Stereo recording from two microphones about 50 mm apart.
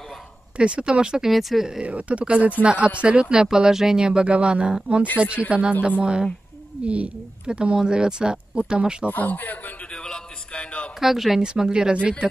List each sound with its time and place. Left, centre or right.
0.6 s speech: right
1.3 s speech: centre
1.7 s a woman's voice: right
9.1 s a man's voice: left
9.9 s a sound: centre
11.0 s a woman's voice: centre